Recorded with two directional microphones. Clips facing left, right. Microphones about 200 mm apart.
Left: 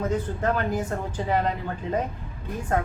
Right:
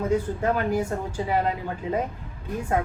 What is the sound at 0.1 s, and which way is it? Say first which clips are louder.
A man's voice: right 2 dB; 10° right (ahead or behind).